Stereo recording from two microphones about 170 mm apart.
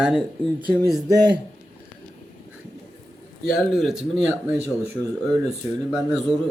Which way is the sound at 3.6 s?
Centre (ahead or behind).